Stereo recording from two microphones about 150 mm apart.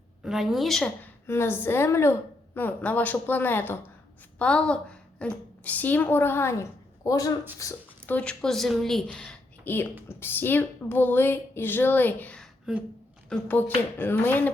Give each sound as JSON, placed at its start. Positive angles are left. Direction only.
{"t": 0.2, "sound": "a woman's voice", "side_deg": -5}
{"t": 8.0, "sound": "speech", "side_deg": 10}